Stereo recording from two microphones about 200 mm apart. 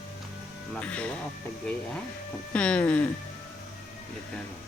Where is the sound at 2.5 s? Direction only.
5° left (ahead or behind).